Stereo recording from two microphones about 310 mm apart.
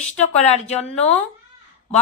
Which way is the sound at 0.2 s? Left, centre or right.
Left.